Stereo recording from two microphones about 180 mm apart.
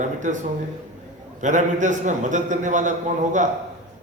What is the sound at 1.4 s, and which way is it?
A man's voice, 45° right (ahead or behind).